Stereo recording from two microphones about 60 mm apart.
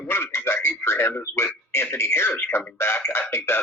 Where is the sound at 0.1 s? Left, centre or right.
Left.